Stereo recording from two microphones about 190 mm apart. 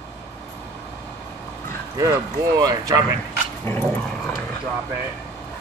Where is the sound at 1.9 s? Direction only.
20° right (ahead or behind).